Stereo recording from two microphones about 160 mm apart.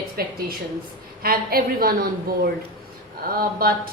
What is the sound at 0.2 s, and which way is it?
A woman's voice, 70° right (ahead or behind).